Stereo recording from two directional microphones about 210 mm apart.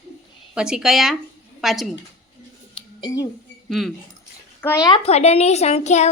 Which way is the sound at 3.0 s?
15° left (ahead or behind).